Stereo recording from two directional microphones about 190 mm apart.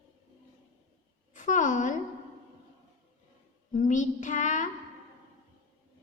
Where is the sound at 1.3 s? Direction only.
40° left (ahead or behind).